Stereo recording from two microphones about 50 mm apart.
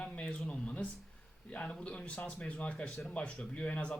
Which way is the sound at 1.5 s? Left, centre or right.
Left.